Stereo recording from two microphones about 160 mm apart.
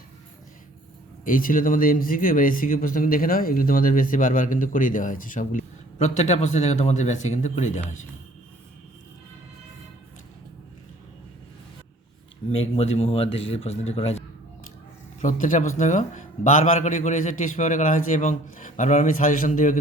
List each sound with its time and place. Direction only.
1.2 s speech: 60° left (ahead or behind)
12.5 s a man's voice: 40° left (ahead or behind)
15.2 s a man's voice: 55° left (ahead or behind)